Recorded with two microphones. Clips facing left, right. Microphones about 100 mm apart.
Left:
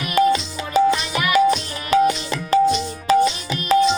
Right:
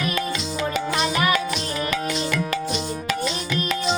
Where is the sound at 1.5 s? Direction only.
30° left (ahead or behind).